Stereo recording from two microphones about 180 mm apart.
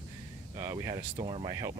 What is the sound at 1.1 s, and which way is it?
Speech, 30° right (ahead or behind).